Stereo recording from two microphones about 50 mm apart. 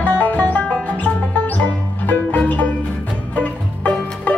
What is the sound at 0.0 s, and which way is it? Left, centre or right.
Music, left.